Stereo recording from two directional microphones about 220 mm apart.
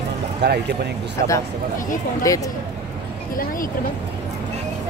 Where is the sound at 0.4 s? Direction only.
50° right (ahead or behind).